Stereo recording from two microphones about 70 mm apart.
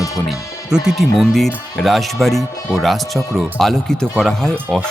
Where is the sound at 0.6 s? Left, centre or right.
Centre.